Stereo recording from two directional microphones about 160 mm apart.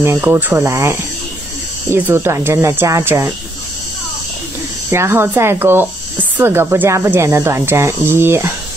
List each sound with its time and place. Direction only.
0.0 s speech: 15° right (ahead or behind)
4.9 s speech: 15° right (ahead or behind)